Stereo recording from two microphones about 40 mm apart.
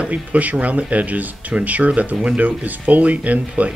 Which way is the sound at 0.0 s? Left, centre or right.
Right.